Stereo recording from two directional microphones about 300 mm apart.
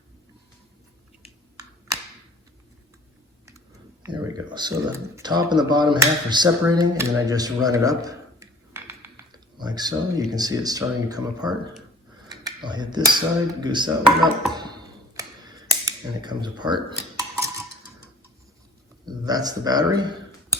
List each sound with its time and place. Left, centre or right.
4.1 s speech: centre
15.1 s a sound: centre
19.0 s speech: centre